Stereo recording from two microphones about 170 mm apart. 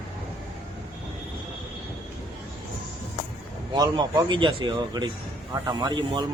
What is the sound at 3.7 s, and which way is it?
A man's voice, 25° right (ahead or behind).